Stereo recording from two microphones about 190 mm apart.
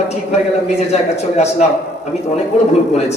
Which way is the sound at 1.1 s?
35° left (ahead or behind).